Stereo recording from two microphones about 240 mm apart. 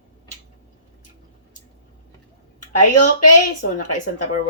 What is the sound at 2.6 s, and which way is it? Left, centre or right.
Speech, left.